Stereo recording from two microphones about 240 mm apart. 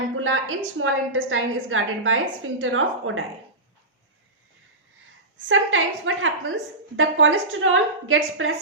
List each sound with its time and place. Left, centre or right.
0.2 s a woman's voice: right
5.5 s a woman's voice: right